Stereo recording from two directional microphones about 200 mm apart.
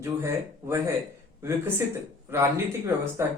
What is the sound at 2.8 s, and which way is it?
Speech, 15° right (ahead or behind).